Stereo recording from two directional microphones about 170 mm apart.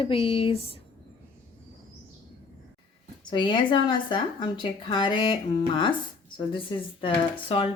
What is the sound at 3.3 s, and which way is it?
A woman's voice, 30° left (ahead or behind).